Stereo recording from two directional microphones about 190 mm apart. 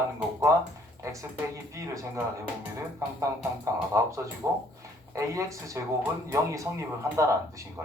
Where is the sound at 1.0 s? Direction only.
15° right (ahead or behind).